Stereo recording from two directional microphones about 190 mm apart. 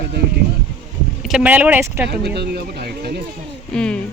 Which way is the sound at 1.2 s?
5° right (ahead or behind).